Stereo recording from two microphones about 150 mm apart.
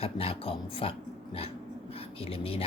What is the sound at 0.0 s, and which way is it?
Speech, 40° left (ahead or behind).